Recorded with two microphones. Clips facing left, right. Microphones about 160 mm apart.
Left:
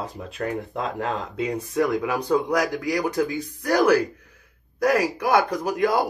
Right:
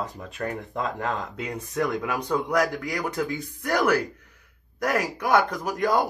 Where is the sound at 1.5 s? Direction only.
5° left (ahead or behind).